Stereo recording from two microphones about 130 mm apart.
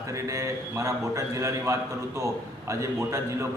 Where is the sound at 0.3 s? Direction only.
25° right (ahead or behind).